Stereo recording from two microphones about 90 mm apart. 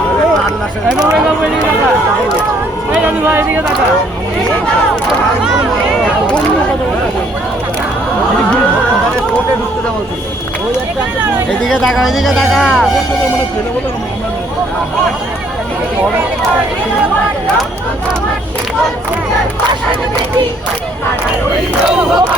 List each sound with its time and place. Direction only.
2.9 s speech: 15° right (ahead or behind)
11.8 s speech: centre (ahead or behind)